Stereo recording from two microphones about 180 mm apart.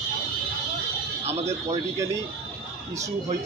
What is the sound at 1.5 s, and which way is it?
Speech, 15° right (ahead or behind).